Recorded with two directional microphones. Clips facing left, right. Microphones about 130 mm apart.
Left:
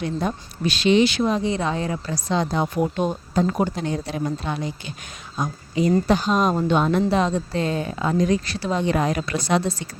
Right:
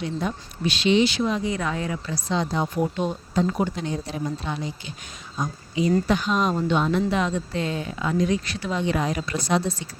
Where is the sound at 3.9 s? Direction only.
65° left (ahead or behind); by 5.9 s 50° left (ahead or behind).